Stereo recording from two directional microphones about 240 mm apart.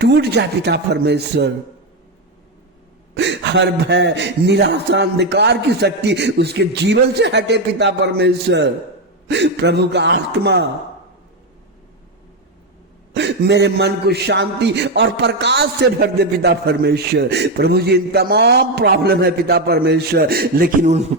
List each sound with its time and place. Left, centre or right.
0.0 s a man's voice: right
3.2 s a man's voice: right
13.1 s a man's voice: right